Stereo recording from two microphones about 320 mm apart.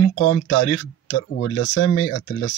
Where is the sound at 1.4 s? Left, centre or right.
Left.